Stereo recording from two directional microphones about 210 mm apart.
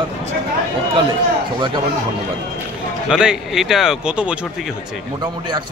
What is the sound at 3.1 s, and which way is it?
A man's voice, centre (ahead or behind).